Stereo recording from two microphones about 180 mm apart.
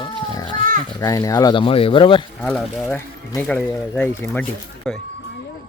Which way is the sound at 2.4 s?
5° left (ahead or behind).